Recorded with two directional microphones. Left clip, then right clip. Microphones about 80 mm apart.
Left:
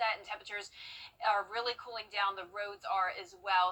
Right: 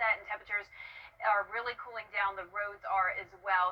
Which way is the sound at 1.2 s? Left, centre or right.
Left.